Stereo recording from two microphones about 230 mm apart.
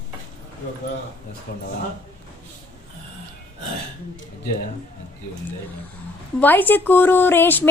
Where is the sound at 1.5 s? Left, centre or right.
Left.